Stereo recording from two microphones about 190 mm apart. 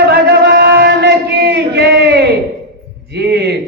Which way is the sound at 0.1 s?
65° right (ahead or behind).